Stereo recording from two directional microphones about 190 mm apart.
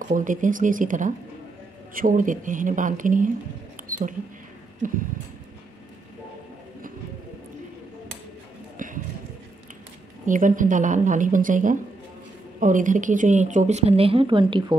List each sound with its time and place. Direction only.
0.0 s speech: 45° right (ahead or behind)
3.9 s mouse: 45° right (ahead or behind)
8.7 s a sound: 45° right (ahead or behind)
10.2 s speech: 45° right (ahead or behind); by 14.8 s 25° right (ahead or behind)